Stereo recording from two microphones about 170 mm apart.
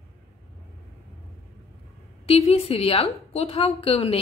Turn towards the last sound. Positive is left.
turn(degrees=35)  # may be behind; listen again after turning